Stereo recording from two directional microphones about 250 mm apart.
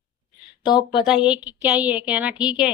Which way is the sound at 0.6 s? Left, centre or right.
Centre.